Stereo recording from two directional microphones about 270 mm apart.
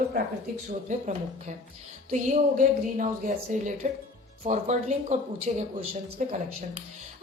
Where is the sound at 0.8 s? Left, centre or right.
Right.